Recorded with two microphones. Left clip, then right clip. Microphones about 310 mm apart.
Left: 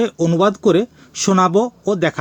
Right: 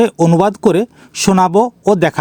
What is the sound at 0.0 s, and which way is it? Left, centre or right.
Speech, right.